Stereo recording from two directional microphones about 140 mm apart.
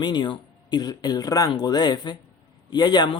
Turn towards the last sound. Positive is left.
turn(degrees=30)  # may be behind; listen again after turning